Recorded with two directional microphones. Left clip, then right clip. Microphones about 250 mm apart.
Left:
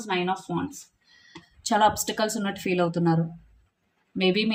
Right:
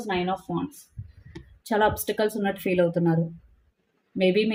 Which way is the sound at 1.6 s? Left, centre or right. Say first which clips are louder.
Left 2 dB; centre.